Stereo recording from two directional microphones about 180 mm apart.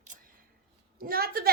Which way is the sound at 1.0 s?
55° right (ahead or behind).